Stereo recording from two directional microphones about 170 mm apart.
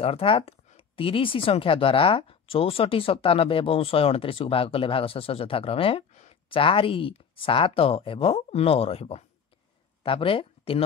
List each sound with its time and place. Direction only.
0.0 s speech: 35° left (ahead or behind)